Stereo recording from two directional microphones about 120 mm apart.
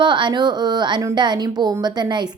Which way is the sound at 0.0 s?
40° right (ahead or behind).